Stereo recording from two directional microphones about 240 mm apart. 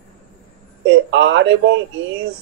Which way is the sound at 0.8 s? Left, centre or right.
Right.